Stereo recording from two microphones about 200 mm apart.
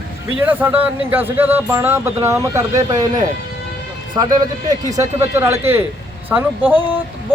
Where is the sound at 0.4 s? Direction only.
10° right (ahead or behind).